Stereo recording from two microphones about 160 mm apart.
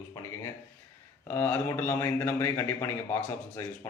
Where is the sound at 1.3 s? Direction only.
15° left (ahead or behind).